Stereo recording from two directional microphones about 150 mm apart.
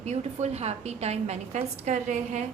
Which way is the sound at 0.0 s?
45° right (ahead or behind).